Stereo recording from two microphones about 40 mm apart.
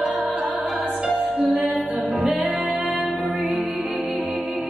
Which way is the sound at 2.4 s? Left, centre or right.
Right.